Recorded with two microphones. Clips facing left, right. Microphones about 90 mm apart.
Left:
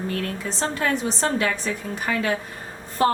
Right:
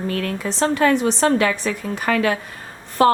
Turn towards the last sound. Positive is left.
turn(degrees=-80)